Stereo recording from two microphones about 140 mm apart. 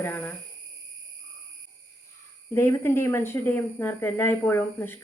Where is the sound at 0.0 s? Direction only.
15° left (ahead or behind).